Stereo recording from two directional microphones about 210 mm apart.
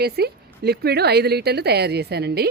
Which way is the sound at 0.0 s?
50° right (ahead or behind).